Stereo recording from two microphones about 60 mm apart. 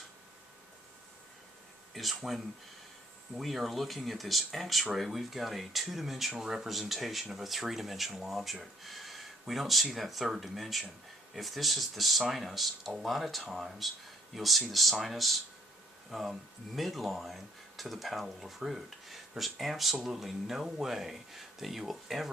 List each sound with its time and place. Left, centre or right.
1.9 s speech: centre